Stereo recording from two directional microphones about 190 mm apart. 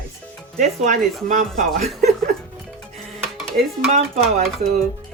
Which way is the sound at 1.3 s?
40° right (ahead or behind).